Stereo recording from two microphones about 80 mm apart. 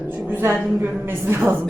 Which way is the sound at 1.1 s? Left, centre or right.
Right.